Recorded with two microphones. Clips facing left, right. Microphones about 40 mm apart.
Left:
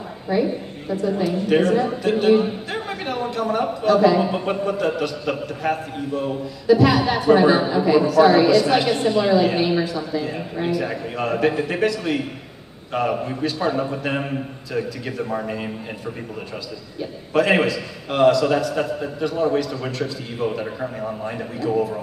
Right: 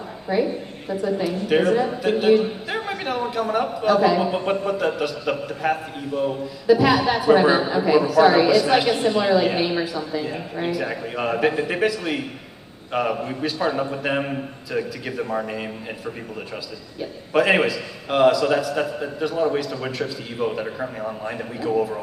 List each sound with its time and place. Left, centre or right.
0.3 s a woman's voice: centre
17.0 s a woman's voice: centre